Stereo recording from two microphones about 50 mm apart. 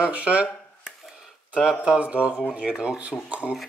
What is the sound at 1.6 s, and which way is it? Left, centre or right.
Speech, centre.